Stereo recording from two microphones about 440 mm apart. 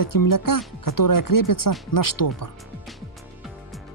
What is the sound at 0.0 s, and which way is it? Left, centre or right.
Speech, left.